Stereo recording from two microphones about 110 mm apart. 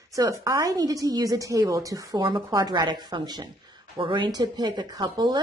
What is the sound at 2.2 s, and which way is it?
Speech, 45° right (ahead or behind).